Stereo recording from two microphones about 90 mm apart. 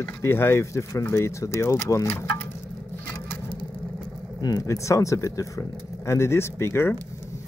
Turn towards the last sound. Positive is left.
turn(degrees=25)  # may be behind; listen again after turning